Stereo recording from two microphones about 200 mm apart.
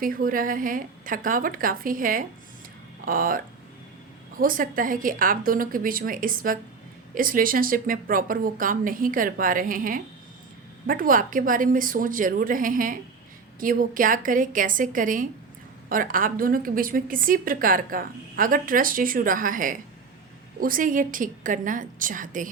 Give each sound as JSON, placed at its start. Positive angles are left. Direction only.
{"t": 0.0, "sound": "a woman's voice", "side_deg": -45}